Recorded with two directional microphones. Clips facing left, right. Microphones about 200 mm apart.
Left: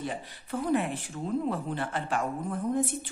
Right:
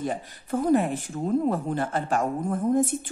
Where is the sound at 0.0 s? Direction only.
45° right (ahead or behind).